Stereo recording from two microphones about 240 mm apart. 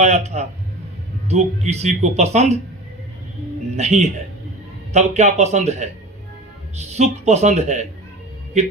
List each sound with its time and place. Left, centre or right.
0.0 s speech: right
3.8 s speech: right